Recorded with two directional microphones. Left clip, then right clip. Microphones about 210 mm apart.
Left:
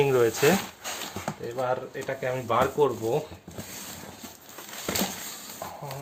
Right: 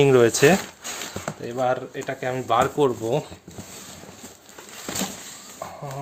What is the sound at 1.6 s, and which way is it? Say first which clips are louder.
Speech: right 5 dB; 50° right (ahead or behind).